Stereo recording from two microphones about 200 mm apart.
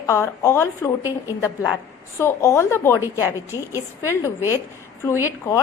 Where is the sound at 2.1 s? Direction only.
15° left (ahead or behind).